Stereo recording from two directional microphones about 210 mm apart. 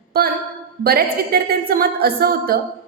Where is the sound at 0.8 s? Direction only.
45° right (ahead or behind).